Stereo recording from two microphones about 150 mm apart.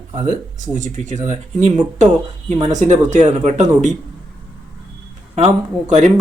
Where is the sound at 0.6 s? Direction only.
60° right (ahead or behind).